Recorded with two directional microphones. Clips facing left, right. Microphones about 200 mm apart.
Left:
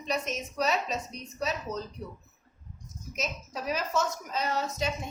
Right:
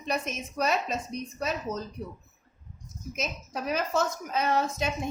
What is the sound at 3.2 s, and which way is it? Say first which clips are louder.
A woman's voice: right 1 dB; 55° right (ahead or behind).